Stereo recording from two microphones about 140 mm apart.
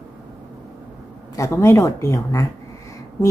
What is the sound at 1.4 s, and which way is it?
A woman's voice, 20° left (ahead or behind).